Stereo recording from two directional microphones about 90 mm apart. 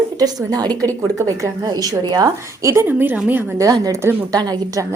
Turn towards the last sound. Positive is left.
turn(degrees=-45)  # may be behind; listen again after turning